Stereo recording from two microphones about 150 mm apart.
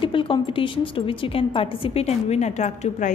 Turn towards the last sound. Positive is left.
turn(degrees=50)  # may be behind; listen again after turning